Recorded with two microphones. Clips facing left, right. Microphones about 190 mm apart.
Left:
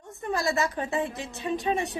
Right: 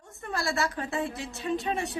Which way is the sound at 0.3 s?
20° left (ahead or behind).